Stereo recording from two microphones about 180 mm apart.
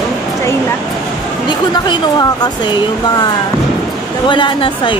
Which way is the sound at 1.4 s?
25° left (ahead or behind).